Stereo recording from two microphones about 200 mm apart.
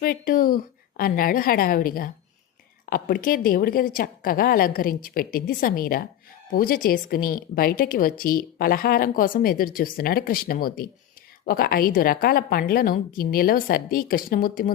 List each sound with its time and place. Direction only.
0.0 s a woman's voice: 45° left (ahead or behind)